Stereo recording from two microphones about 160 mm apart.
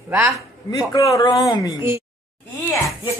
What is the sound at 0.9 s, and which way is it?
Speech, 20° left (ahead or behind).